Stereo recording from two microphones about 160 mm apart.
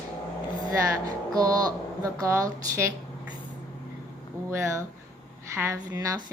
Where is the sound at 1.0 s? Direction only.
25° right (ahead or behind).